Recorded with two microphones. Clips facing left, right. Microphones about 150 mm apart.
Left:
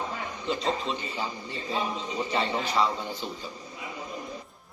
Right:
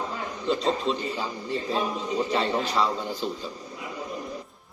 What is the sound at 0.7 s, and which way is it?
Speech, 5° left (ahead or behind).